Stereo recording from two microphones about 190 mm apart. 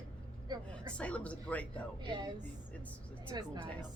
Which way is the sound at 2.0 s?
25° right (ahead or behind).